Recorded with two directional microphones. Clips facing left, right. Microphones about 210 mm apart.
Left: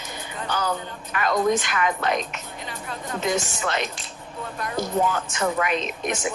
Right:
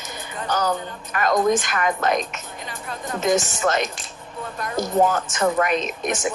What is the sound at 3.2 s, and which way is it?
Speech, 45° right (ahead or behind).